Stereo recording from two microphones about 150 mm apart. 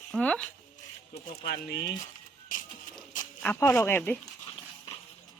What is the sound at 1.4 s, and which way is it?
Speech, 90° left.